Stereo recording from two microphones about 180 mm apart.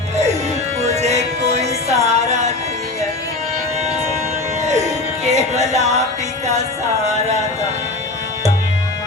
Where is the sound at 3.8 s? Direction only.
40° right (ahead or behind).